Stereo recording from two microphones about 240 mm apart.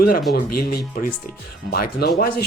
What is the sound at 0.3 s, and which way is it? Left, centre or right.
Speech, left.